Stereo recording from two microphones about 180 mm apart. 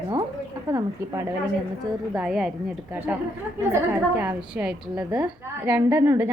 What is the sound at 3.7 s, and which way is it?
A woman's voice, 10° right (ahead or behind).